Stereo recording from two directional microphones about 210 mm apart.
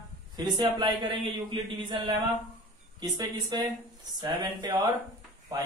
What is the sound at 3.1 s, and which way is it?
Speech, 20° right (ahead or behind).